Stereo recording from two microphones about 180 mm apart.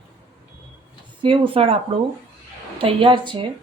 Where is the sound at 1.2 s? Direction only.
30° right (ahead or behind).